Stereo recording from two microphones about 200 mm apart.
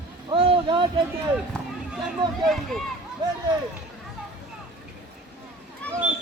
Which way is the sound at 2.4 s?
Centre (ahead or behind).